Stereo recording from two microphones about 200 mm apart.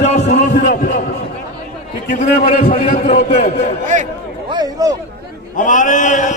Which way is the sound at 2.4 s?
40° left (ahead or behind).